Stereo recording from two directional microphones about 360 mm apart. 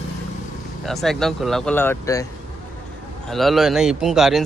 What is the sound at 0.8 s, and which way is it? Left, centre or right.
A man's voice, centre.